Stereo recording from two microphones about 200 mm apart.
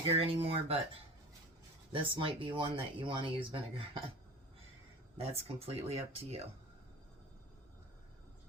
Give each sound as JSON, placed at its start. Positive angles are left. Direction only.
{"t": 0.0, "sound": "speech", "side_deg": -30}
{"t": 1.9, "sound": "speech", "side_deg": -25}
{"t": 5.1, "sound": "speech", "side_deg": -30}